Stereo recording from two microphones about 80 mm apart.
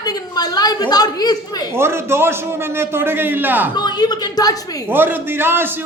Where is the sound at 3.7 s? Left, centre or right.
Left.